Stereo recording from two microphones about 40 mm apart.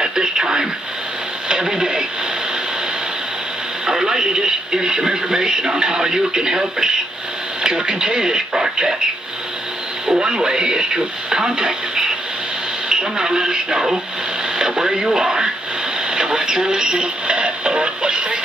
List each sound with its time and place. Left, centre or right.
0.0 s radio: centre
3.8 s speech: centre
10.1 s speech: right